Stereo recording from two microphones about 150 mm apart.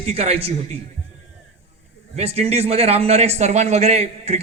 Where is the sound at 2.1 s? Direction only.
45° right (ahead or behind).